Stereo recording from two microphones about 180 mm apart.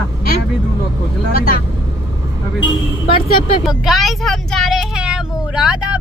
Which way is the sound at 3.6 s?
Centre (ahead or behind).